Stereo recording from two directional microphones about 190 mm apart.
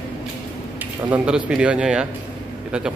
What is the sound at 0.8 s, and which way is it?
Speech, 10° right (ahead or behind).